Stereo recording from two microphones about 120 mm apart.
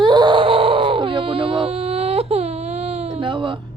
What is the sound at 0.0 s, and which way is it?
Wail, 40° right (ahead or behind).